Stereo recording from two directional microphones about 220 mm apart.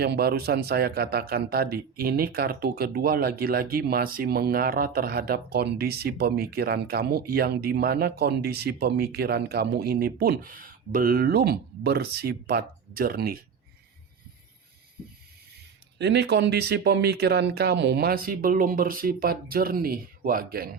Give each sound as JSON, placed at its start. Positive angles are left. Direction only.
{"t": 0.0, "sound": "a man's voice", "side_deg": -45}
{"t": 16.0, "sound": "a man's voice", "side_deg": -50}